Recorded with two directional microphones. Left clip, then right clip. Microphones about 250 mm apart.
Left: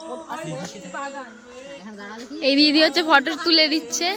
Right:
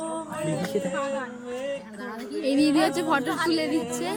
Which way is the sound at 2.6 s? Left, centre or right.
Centre.